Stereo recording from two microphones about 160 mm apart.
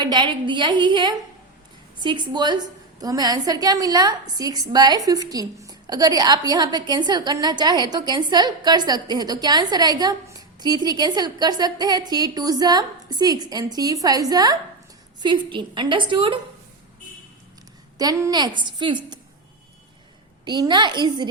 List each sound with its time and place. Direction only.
0.0 s a woman's voice: 30° right (ahead or behind)
17.9 s a woman's voice: 20° right (ahead or behind)
20.4 s a woman's voice: 25° right (ahead or behind)